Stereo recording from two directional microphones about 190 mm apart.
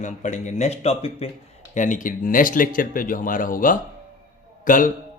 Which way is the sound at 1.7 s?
45° left (ahead or behind).